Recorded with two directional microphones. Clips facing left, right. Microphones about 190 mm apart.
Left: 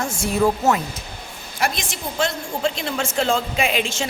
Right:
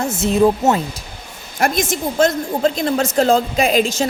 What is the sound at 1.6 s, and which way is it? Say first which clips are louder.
A woman's voice: right 7 dB; 45° right (ahead or behind).